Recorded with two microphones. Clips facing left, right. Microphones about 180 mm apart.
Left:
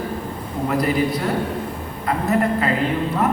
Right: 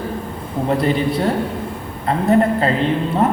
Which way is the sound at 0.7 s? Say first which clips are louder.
Right 2 dB; 30° right (ahead or behind).